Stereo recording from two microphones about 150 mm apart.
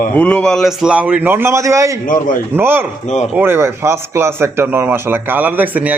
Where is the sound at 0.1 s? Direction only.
10° left (ahead or behind).